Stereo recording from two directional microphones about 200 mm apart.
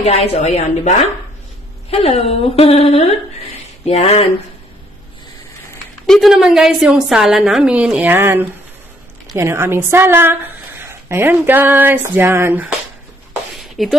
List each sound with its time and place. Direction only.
0.0 s a woman's voice: 30° left (ahead or behind)
6.0 s a woman's voice: centre (ahead or behind)
13.6 s a sound: centre (ahead or behind)